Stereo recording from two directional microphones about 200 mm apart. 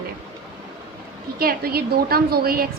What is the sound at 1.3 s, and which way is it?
A woman's voice, 50° right (ahead or behind).